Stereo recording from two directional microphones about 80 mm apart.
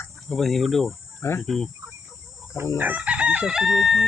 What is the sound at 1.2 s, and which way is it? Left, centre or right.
Speech, left.